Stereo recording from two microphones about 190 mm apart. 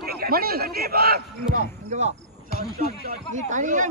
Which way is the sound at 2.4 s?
50° left (ahead or behind).